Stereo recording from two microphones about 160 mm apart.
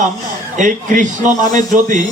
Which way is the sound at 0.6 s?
55° right (ahead or behind).